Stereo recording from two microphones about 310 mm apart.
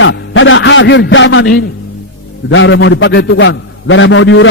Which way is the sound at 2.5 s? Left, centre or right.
Left.